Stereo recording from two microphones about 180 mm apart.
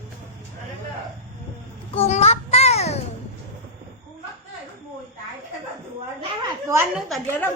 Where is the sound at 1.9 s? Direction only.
35° left (ahead or behind).